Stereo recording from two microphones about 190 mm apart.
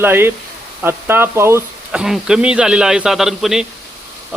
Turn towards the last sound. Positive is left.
turn(degrees=0)  # may be behind; listen again after turning